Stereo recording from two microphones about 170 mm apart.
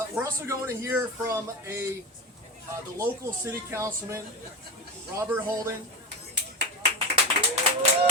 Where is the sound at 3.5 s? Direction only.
15° right (ahead or behind).